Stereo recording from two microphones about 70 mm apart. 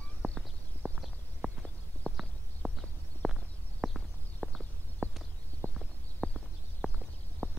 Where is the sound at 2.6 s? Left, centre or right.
Centre.